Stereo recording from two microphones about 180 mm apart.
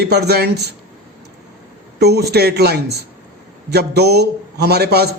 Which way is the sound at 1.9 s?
65° right (ahead or behind).